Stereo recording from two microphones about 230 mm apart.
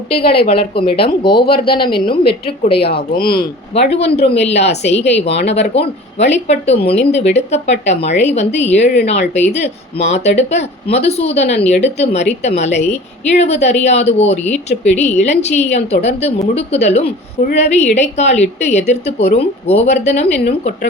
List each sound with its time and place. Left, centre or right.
0.3 s speech: left
3.1 s speech: left
3.9 s speech: left